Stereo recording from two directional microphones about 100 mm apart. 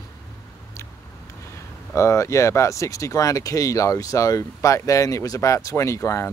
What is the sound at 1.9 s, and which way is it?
Speech, 30° left (ahead or behind).